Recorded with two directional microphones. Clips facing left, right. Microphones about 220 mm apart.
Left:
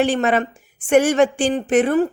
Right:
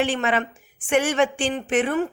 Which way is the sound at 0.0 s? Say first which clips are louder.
Left 5 dB; 40° left (ahead or behind).